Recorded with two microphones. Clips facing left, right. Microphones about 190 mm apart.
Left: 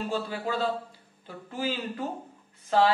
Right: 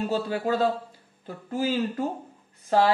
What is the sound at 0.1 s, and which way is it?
Speech, 45° right (ahead or behind).